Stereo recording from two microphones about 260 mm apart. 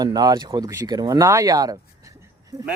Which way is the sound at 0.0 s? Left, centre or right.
Centre.